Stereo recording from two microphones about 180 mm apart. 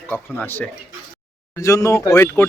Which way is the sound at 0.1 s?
10° left (ahead or behind).